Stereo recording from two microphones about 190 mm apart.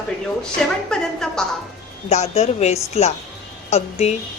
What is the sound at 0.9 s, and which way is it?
Speech, 5° left (ahead or behind).